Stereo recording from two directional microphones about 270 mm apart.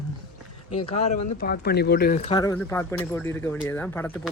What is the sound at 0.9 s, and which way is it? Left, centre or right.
Speech, left.